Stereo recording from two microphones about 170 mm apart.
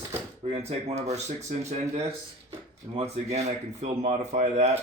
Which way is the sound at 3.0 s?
40° right (ahead or behind).